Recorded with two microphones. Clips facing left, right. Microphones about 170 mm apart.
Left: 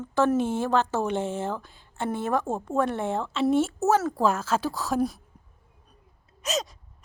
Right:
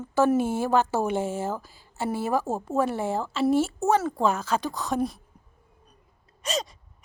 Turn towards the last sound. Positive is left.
turn(degrees=0)  # may be behind; listen again after turning